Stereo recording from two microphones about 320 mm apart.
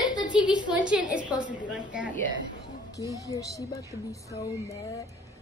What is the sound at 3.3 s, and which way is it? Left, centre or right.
Speech, centre.